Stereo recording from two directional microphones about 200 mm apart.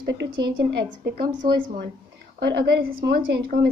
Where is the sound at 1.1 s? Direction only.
45° right (ahead or behind).